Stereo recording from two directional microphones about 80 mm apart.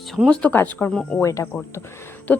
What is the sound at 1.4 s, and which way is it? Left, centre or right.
Speech, left.